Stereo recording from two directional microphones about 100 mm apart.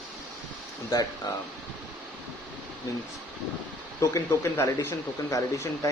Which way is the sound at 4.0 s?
30° left (ahead or behind).